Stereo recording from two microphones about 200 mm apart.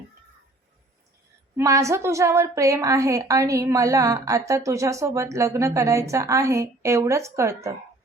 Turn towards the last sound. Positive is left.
turn(degrees=-15)  # may be behind; listen again after turning